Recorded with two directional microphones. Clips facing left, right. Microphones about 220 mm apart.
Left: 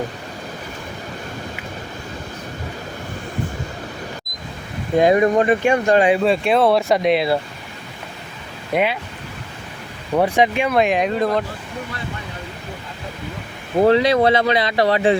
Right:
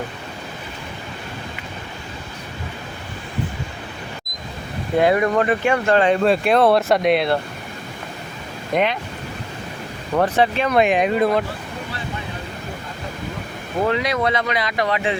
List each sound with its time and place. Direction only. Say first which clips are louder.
4.9 s speech: left 3 dB; 20° left (ahead or behind); by 7.3 s centre (ahead or behind)
8.7 s speech: even; 5° left (ahead or behind)
10.2 s speech: left 1 dB; 15° left (ahead or behind)
10.7 s speech: right 1 dB; centre (ahead or behind)
13.8 s speech: left 7 dB; 30° left (ahead or behind)